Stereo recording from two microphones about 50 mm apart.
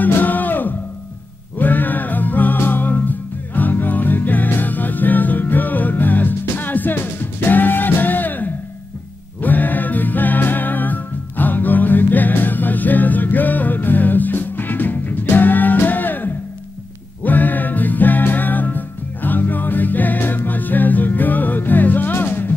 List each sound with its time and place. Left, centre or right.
0.0 s music: left